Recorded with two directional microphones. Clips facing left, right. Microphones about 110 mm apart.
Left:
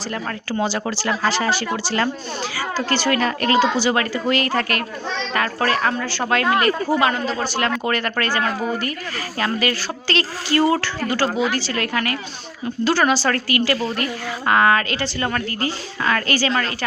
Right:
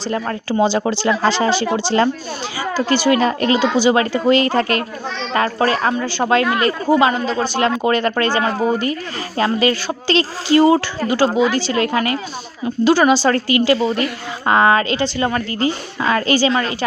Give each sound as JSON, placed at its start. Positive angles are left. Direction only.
{"t": 0.5, "sound": "speech", "side_deg": -20}